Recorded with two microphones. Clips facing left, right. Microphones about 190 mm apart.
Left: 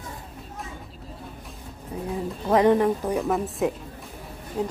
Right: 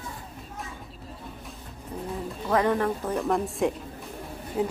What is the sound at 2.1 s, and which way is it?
Music, 20° left (ahead or behind).